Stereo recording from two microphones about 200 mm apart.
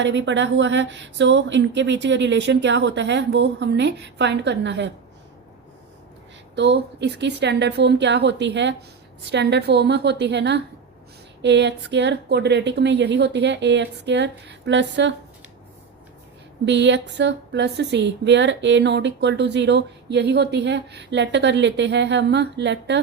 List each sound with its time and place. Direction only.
0.0 s speech: 65° right (ahead or behind)
6.6 s speech: 60° right (ahead or behind)
16.6 s speech: 60° right (ahead or behind)